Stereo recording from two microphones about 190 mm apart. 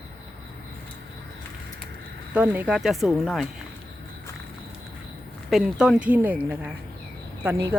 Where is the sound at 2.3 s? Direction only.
5° right (ahead or behind).